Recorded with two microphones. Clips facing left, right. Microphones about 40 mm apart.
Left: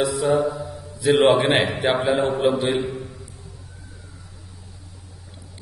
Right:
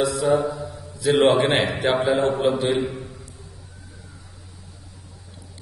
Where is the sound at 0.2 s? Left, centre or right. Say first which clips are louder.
Left 1 dB; left.